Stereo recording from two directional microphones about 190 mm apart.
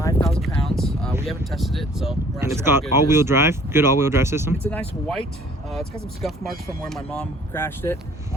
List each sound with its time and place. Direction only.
0.0 s a sound: 15° left (ahead or behind)
0.3 s a sound: centre (ahead or behind)
1.3 s speech: centre (ahead or behind)
2.4 s speech: 15° right (ahead or behind)
4.6 s speech: 5° left (ahead or behind)
6.9 s speech: 5° left (ahead or behind)